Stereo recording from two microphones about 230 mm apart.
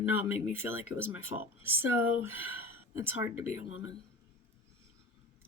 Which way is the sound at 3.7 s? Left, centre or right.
Left.